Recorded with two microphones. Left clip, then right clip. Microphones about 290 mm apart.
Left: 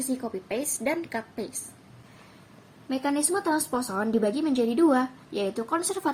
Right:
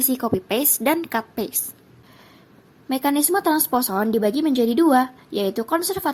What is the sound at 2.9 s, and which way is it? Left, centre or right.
A woman's voice, right.